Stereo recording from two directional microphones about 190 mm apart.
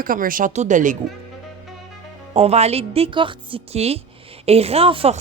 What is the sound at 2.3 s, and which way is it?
Speech, 35° right (ahead or behind).